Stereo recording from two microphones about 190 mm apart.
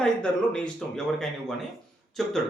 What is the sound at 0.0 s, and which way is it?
Speech, 5° left (ahead or behind).